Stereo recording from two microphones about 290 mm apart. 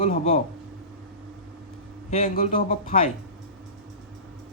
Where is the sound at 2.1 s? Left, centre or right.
Left.